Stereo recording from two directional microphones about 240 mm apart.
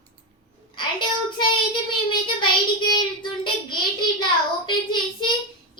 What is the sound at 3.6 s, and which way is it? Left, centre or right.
Child singing, centre.